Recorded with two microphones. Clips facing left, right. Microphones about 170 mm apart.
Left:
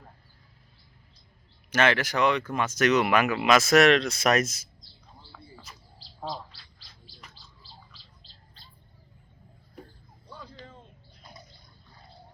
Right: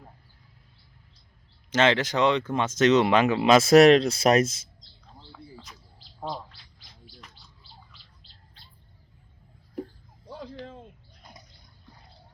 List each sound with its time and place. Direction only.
1.7 s speech: 20° right (ahead or behind)
6.1 s bird: 20° right (ahead or behind)
10.3 s a sound: 90° right